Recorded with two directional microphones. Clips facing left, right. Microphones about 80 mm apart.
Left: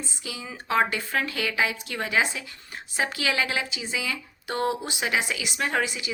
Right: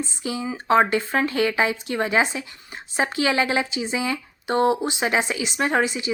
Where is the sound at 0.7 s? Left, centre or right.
Right.